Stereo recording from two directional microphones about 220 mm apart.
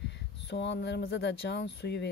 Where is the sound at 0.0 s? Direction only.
50° left (ahead or behind).